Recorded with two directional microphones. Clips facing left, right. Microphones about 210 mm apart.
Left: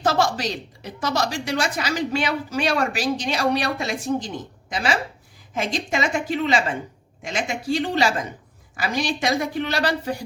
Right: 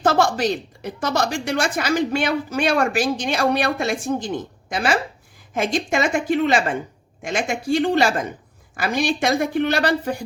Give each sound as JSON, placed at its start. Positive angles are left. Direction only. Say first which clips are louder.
{"t": 0.0, "sound": "a woman's voice", "louder": "right 3 dB", "side_deg": -55}